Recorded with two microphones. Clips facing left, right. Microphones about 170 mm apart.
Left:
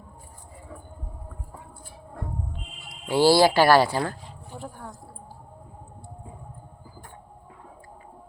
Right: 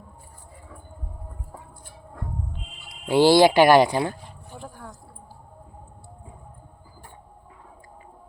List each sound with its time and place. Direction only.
3.1 s speech: 20° right (ahead or behind)